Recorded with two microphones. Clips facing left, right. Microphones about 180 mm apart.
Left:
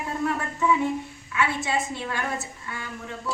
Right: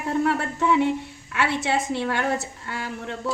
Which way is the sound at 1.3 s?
75° right (ahead or behind).